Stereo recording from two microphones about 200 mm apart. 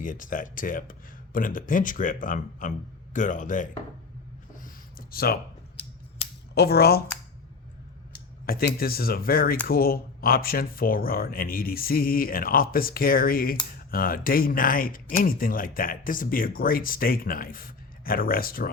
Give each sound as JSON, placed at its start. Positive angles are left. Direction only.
{"t": 0.0, "sound": "speech", "side_deg": 45}
{"t": 4.6, "sound": "a sound", "side_deg": 50}
{"t": 6.5, "sound": "speech", "side_deg": 55}
{"t": 8.4, "sound": "speech", "side_deg": 50}